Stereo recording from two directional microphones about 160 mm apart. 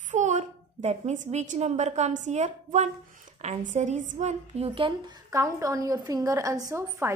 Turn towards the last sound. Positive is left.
turn(degrees=-20)  # may be behind; listen again after turning